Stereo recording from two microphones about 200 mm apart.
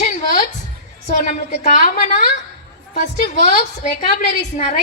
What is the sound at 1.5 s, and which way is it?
A woman's voice, 45° left (ahead or behind).